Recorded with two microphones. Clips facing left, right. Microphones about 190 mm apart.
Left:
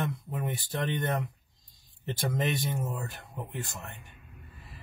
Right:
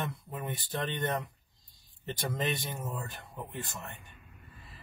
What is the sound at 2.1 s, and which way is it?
Speech, 15° left (ahead or behind).